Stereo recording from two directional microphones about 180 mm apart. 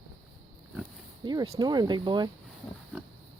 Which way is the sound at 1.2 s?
25° right (ahead or behind).